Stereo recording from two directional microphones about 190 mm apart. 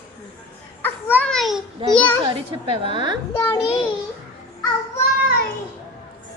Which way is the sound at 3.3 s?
10° left (ahead or behind).